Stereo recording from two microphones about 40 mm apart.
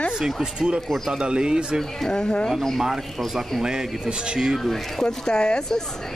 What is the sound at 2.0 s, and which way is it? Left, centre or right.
Speech, centre.